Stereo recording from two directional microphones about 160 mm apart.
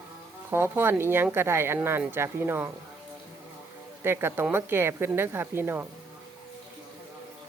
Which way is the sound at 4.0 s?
15° right (ahead or behind).